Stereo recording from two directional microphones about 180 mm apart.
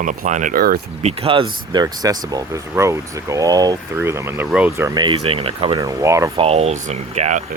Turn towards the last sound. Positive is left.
turn(degrees=-40)  # may be behind; listen again after turning